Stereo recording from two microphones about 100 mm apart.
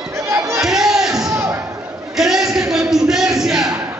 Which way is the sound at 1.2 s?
30° right (ahead or behind).